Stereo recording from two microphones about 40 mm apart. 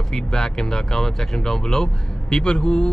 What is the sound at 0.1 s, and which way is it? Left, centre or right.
Speech, centre.